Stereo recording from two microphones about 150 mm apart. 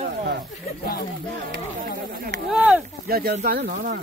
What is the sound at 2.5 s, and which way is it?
Speech, 10° right (ahead or behind).